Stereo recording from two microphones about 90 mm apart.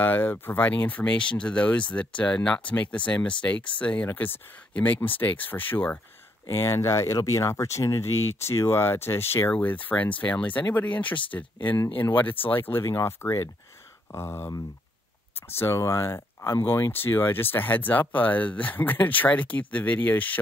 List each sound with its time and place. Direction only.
0.0 s speech: 20° left (ahead or behind)
6.5 s speech: 35° left (ahead or behind)